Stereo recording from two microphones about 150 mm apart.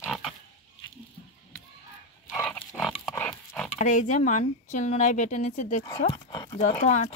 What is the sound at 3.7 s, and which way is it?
Speech, 55° left (ahead or behind).